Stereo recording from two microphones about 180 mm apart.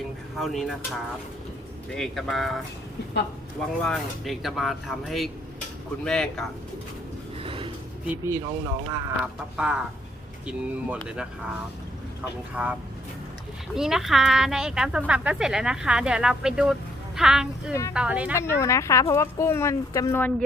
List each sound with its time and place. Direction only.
0.3 s speech: centre (ahead or behind)
1.9 s speech: centre (ahead or behind)
3.8 s speech: centre (ahead or behind)
7.4 s a sound: 30° right (ahead or behind)
8.0 s speech: 15° right (ahead or behind)
13.7 s speech: centre (ahead or behind)
18.3 s speech: 15° left (ahead or behind)